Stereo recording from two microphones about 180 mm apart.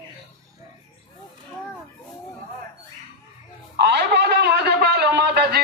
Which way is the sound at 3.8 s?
70° right (ahead or behind).